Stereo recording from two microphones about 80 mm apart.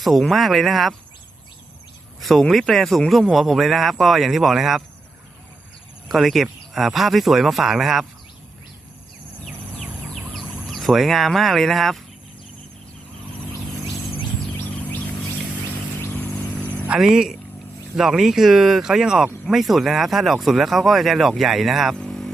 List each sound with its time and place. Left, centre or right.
0.0 s speech: centre
2.2 s speech: centre
6.1 s speech: centre
10.3 s speech: centre
16.9 s speech: centre
21.9 s vehicle: centre